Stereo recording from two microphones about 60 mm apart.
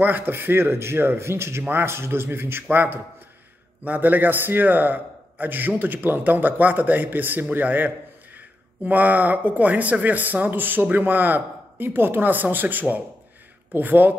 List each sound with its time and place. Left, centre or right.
0.0 s a man's voice: right